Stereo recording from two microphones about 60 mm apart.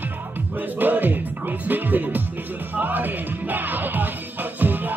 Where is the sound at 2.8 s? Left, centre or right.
Right.